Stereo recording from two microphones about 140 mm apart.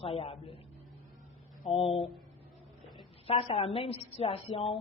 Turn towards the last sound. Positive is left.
turn(degrees=45)  # may be behind; listen again after turning